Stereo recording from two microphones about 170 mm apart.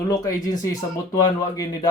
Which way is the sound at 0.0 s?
20° left (ahead or behind).